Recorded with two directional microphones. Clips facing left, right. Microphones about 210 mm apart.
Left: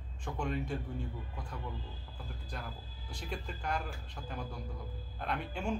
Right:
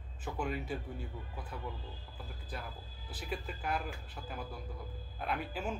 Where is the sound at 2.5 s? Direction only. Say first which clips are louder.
Right 1 dB; 5° right (ahead or behind).